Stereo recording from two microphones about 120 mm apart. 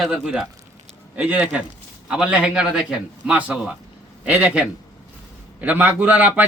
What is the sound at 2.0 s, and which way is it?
A man's voice, 10° right (ahead or behind).